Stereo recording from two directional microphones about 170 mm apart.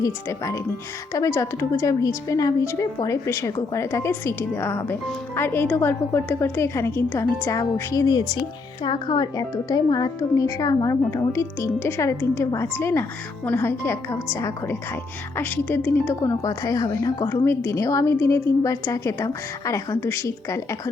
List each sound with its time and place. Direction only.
0.0 s a woman's voice: 20° left (ahead or behind)